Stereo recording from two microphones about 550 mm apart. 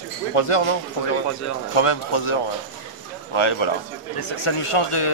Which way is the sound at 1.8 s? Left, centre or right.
Left.